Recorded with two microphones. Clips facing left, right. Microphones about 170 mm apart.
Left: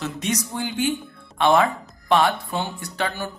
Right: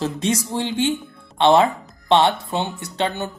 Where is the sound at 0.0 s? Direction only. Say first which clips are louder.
Right 4 dB; 30° right (ahead or behind).